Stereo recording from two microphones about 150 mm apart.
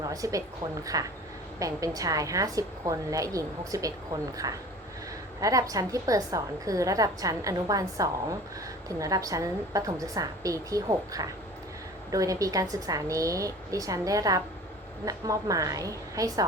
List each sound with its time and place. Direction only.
0.0 s a woman's voice: 25° right (ahead or behind)